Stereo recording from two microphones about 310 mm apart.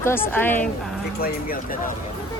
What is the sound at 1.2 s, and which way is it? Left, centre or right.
Speech, left.